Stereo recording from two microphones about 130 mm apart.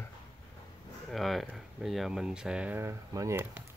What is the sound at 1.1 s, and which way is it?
Speech, centre (ahead or behind).